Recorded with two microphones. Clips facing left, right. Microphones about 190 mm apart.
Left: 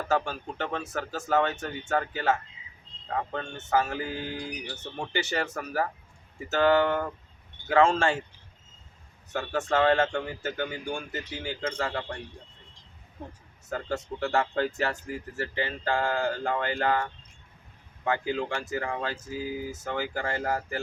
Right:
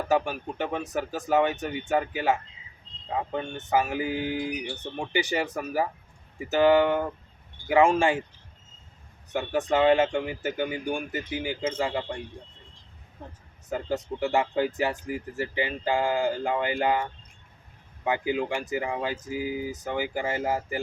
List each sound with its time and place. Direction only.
0.1 s speech: 15° right (ahead or behind)
9.3 s speech: 15° right (ahead or behind)
13.7 s speech: 15° right (ahead or behind)